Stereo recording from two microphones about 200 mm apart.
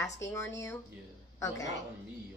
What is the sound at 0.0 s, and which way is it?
Speech, 15° left (ahead or behind).